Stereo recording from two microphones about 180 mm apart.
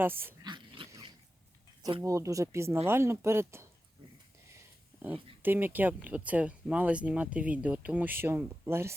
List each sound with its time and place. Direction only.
0.0 s speech: 10° right (ahead or behind)
0.4 s dog: 25° right (ahead or behind)
1.8 s speech: 20° right (ahead or behind)
5.0 s speech: 10° right (ahead or behind)